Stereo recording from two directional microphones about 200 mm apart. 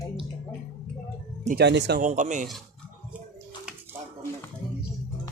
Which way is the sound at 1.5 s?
55° right (ahead or behind).